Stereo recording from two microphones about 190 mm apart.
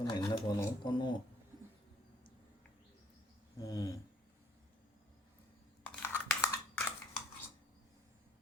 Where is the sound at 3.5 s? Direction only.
20° left (ahead or behind).